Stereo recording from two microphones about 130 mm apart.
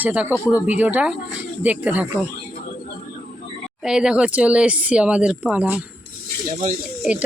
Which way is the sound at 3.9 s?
5° right (ahead or behind).